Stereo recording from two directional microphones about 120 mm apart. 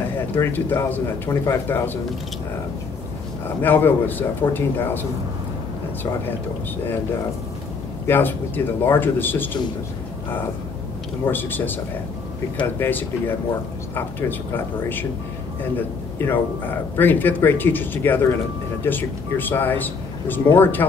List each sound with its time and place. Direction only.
0.4 s speech: 15° left (ahead or behind)
3.6 s speech: 15° left (ahead or behind)
8.1 s speech: 15° left (ahead or behind)
11.2 s speech: 15° left (ahead or behind)
14.5 s speech: 15° left (ahead or behind)
16.2 s speech: 20° left (ahead or behind)